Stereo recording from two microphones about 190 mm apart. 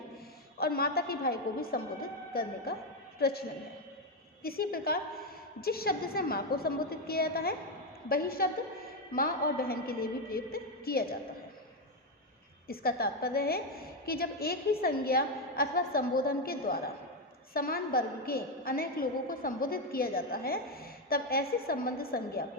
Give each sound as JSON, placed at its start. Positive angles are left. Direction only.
{"t": 0.6, "sound": "a woman's voice", "side_deg": 55}
{"t": 4.4, "sound": "a woman's voice", "side_deg": 55}
{"t": 12.6, "sound": "a woman's voice", "side_deg": 55}